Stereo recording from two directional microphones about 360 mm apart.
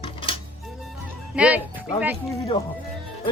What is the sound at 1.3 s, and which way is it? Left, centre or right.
Music, centre.